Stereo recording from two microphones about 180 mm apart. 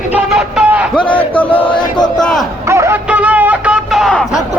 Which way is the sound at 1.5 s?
30° left (ahead or behind).